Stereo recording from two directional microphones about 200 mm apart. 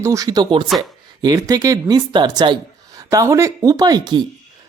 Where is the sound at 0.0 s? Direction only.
15° right (ahead or behind).